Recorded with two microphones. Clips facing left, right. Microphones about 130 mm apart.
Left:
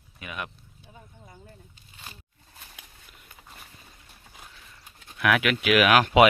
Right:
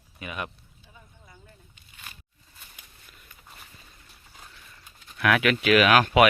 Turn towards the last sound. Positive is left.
turn(degrees=15)  # may be behind; listen again after turning